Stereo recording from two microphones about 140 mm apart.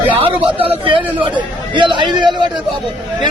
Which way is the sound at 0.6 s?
35° right (ahead or behind).